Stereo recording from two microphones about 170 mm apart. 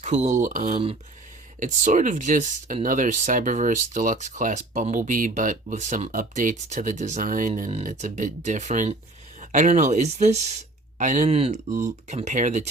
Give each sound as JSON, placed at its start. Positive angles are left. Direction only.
{"t": 0.0, "sound": "speech", "side_deg": -45}